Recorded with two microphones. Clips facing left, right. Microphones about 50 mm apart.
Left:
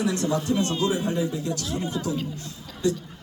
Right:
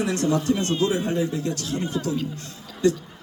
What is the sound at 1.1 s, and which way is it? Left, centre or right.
Speech, right.